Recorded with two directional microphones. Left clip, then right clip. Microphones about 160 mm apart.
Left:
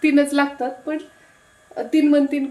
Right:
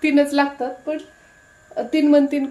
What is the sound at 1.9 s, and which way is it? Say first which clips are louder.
Speech: right 1 dB; 25° right (ahead or behind).